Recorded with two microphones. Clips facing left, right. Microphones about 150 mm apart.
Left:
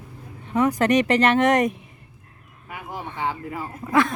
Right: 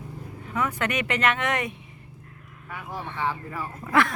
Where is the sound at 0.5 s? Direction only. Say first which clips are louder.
Left 9 dB; 35° left (ahead or behind).